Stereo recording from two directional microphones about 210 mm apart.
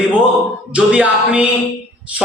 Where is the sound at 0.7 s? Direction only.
5° right (ahead or behind).